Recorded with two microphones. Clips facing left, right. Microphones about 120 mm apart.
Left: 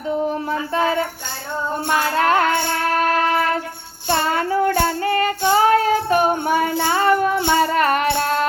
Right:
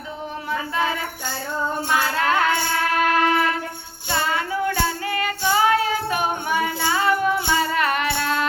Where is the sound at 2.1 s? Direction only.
45° left (ahead or behind).